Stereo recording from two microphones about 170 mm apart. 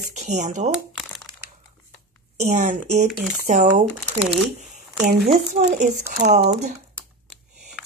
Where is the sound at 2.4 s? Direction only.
45° right (ahead or behind).